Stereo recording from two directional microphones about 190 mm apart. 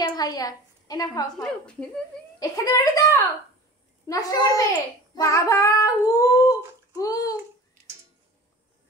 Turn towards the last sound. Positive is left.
turn(degrees=20)  # may be behind; listen again after turning